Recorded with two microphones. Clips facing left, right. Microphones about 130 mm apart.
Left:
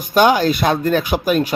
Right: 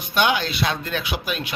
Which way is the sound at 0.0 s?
40° left (ahead or behind).